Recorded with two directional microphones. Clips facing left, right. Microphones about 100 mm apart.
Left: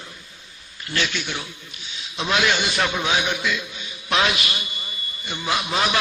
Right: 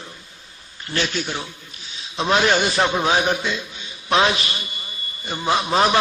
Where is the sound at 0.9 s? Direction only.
35° right (ahead or behind).